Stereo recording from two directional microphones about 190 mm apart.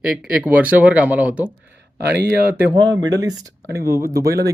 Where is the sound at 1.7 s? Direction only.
65° right (ahead or behind).